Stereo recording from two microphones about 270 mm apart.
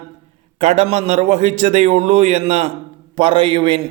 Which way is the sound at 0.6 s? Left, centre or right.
Right.